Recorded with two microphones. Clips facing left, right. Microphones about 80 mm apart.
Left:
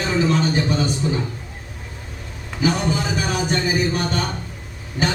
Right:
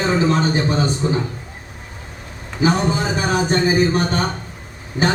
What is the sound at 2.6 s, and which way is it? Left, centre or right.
A man's voice, right.